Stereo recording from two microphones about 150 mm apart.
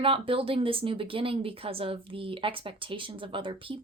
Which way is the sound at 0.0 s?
35° right (ahead or behind).